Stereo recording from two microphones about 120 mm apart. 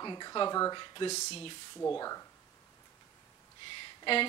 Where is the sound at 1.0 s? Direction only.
60° left (ahead or behind).